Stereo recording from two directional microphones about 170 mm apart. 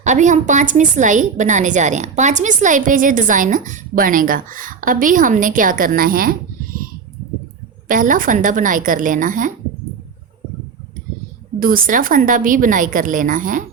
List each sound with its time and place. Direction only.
0.0 s a woman's voice: 45° right (ahead or behind)
7.9 s a woman's voice: 50° right (ahead or behind)
11.6 s a woman's voice: 55° right (ahead or behind)